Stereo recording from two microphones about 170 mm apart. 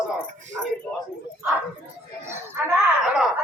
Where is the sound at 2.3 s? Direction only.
15° right (ahead or behind).